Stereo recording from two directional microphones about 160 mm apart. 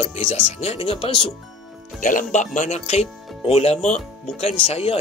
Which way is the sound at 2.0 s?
50° left (ahead or behind).